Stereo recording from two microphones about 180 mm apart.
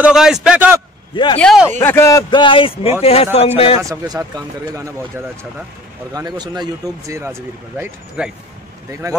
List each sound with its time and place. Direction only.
0.0 s a man's voice: 5° right (ahead or behind)
1.1 s speech: 25° left (ahead or behind)
1.4 s a man's voice: centre (ahead or behind)
1.8 s a man's voice: 15° left (ahead or behind); by 3.8 s 35° left (ahead or behind)
3.8 s speech: 15° right (ahead or behind)